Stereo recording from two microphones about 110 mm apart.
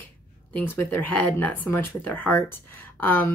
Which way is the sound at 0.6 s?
15° left (ahead or behind).